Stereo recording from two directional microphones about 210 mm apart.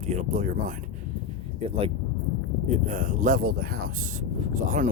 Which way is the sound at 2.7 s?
40° right (ahead or behind).